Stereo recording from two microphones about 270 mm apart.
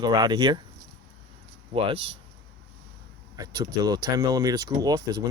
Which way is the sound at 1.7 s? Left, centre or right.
Right.